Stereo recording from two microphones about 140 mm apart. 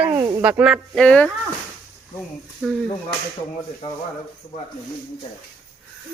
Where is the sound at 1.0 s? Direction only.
10° left (ahead or behind).